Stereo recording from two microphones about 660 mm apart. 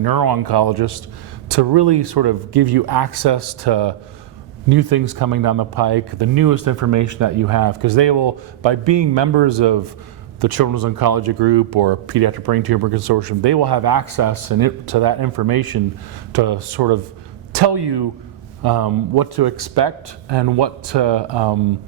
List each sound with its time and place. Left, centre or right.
0.0 s speech: right